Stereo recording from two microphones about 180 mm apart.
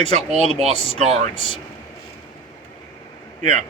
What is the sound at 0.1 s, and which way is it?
Speech, 35° right (ahead or behind).